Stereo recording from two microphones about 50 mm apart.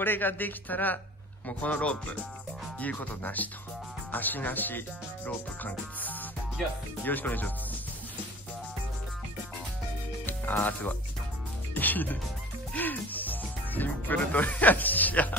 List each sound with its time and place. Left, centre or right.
0.0 s speech: left
10.2 s speech: left
11.7 s music: left